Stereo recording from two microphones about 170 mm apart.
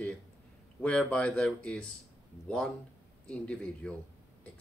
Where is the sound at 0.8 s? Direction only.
5° left (ahead or behind).